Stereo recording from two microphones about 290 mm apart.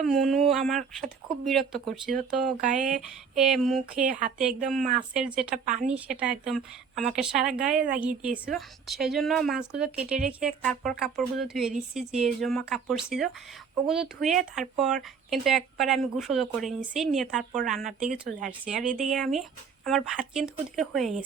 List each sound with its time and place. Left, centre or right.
0.0 s a woman's voice: centre
5.6 s speech: right
5.9 s a woman's voice: centre
18.3 s speech: right
18.6 s a woman's voice: centre